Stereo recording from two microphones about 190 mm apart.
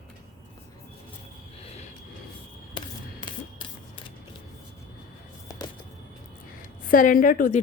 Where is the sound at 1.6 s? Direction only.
35° left (ahead or behind).